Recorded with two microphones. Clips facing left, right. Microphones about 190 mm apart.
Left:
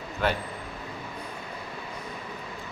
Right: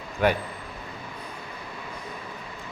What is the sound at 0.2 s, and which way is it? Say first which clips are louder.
Speech: right 4 dB; 15° right (ahead or behind).